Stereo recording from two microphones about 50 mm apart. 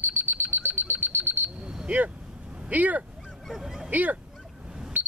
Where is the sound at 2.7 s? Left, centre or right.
Right.